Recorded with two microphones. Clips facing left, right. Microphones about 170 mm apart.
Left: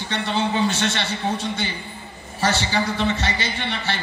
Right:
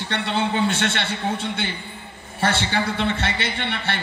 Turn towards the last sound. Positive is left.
turn(degrees=-60)  # may be behind; listen again after turning